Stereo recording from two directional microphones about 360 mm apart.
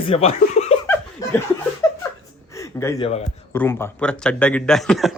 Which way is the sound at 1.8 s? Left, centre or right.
Centre.